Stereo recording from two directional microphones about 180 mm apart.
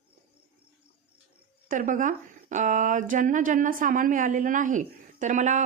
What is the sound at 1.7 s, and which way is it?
Speech, 45° right (ahead or behind).